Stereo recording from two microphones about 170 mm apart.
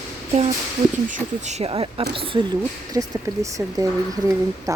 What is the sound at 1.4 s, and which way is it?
Speech, 40° right (ahead or behind).